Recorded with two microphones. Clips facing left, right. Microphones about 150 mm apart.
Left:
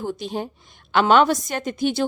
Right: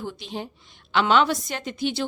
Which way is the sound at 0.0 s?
45° left (ahead or behind).